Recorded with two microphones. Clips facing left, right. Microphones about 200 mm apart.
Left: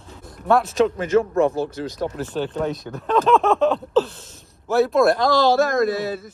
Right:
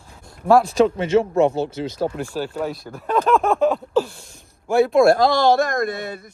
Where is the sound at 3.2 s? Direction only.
10° right (ahead or behind).